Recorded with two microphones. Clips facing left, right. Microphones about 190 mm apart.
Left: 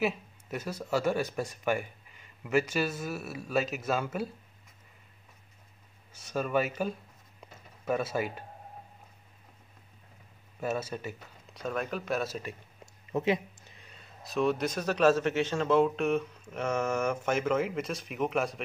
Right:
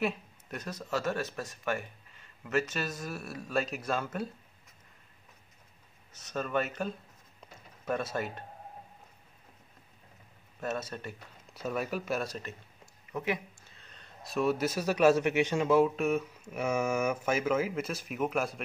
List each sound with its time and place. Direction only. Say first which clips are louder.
0.0 s speech: left 2 dB; 5° left (ahead or behind)
6.1 s speech: left 3 dB; 10° left (ahead or behind)
10.6 s speech: left 3 dB; 10° left (ahead or behind)
11.5 s a man's voice: even; 5° right (ahead or behind)
12.8 s a sound: left 5 dB; 25° left (ahead or behind)
13.7 s a man's voice: right 1 dB; 10° left (ahead or behind)